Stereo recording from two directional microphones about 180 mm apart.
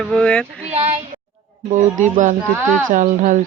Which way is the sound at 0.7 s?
40° right (ahead or behind).